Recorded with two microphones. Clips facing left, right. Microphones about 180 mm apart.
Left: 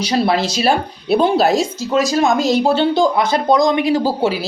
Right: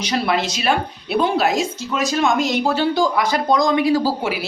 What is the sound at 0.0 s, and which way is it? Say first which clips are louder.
Speech: left 4 dB; 30° left (ahead or behind).